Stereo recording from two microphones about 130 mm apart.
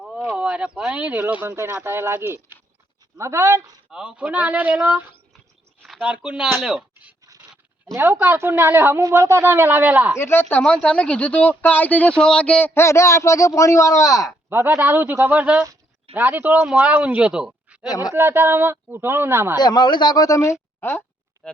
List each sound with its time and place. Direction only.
0.0 s speech: 10° right (ahead or behind)
3.9 s speech: 5° right (ahead or behind)
7.9 s speech: 20° right (ahead or behind)
10.2 s speech: 20° left (ahead or behind)
10.6 s speech: 5° left (ahead or behind); by 14.3 s 25° left (ahead or behind)
14.5 s speech: 15° right (ahead or behind)
17.8 s speech: 30° left (ahead or behind)
18.1 s speech: 20° right (ahead or behind)
19.5 s speech: 35° left (ahead or behind)
21.4 s speech: 5° left (ahead or behind)